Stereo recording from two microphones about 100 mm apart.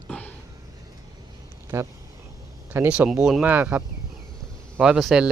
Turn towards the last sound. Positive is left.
turn(degrees=-5)  # may be behind; listen again after turning